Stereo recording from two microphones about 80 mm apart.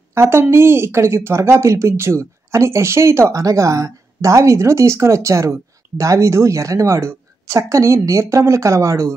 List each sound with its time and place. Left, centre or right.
0.1 s speech: right